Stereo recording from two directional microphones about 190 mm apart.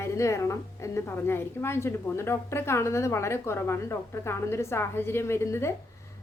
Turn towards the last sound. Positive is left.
turn(degrees=15)  # may be behind; listen again after turning